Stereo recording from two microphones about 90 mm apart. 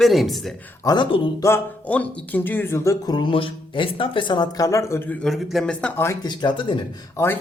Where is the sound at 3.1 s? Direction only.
55° left (ahead or behind).